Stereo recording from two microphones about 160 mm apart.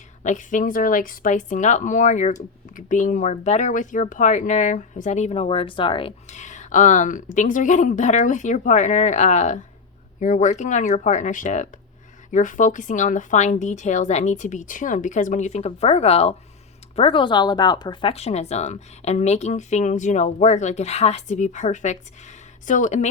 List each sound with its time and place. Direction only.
0.2 s speech: 50° left (ahead or behind)